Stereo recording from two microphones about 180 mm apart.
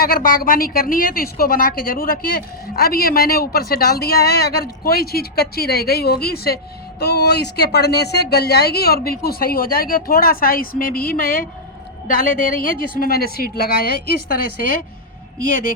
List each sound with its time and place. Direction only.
0.0 s a woman's voice: 55° left (ahead or behind)